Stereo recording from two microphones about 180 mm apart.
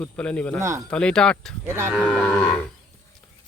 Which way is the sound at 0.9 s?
5° left (ahead or behind).